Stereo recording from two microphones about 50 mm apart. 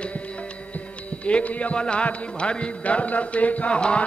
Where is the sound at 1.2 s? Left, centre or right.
Left.